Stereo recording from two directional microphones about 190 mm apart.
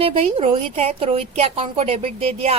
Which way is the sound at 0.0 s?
30° right (ahead or behind).